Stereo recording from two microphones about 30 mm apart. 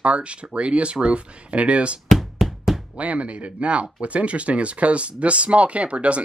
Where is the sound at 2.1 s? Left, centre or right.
Centre.